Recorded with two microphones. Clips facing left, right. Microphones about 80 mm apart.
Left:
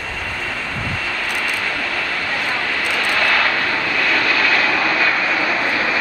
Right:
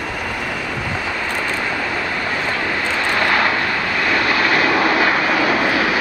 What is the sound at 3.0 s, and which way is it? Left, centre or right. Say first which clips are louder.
Vehicle: right 1 dB; right.